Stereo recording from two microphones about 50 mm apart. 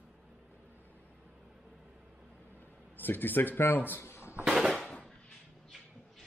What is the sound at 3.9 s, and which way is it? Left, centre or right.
Drawer open or close, left.